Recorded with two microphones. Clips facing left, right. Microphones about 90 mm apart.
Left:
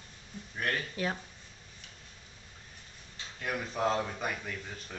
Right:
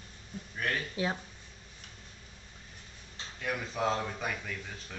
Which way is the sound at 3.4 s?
Centre (ahead or behind).